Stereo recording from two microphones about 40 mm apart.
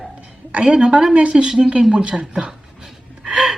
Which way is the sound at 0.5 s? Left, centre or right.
Right.